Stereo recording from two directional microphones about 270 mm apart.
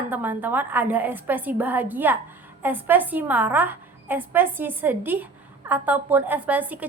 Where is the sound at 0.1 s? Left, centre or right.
Centre.